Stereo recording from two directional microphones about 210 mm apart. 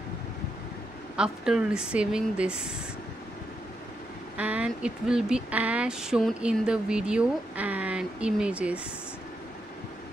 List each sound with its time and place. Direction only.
1.1 s speech: 5° right (ahead or behind)
4.4 s speech: 5° right (ahead or behind)